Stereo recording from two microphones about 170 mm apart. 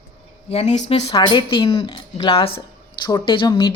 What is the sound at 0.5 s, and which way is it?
A woman's voice, 40° left (ahead or behind).